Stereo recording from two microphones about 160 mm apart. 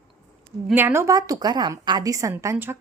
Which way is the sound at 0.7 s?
15° right (ahead or behind).